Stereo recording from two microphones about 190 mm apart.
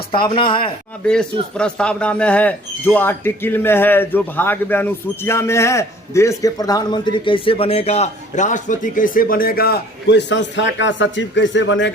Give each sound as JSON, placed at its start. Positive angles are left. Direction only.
{"t": 0.1, "sound": "speech", "side_deg": 25}
{"t": 1.0, "sound": "speech", "side_deg": 5}